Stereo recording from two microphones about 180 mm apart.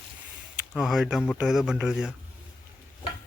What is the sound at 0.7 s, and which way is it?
Speech, centre (ahead or behind).